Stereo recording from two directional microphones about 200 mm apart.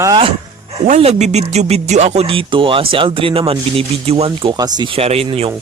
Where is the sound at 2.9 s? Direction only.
25° right (ahead or behind).